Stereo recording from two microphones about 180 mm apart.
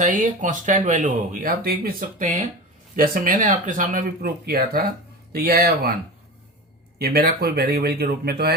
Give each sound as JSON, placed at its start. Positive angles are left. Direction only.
{"t": 0.0, "sound": "speech", "side_deg": -45}
{"t": 7.0, "sound": "speech", "side_deg": -60}